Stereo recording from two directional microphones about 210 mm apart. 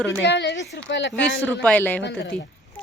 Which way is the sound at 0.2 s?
55° left (ahead or behind).